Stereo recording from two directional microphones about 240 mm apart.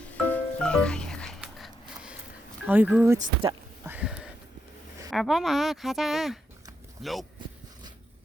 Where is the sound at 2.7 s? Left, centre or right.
Centre.